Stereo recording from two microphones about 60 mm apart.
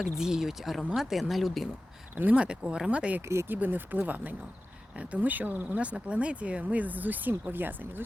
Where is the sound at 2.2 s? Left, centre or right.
Right.